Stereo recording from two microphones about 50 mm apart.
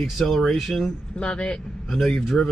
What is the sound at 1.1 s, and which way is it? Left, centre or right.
Speech, left.